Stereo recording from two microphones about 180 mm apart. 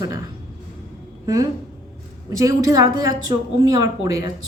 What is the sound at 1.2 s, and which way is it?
Speech, 20° right (ahead or behind).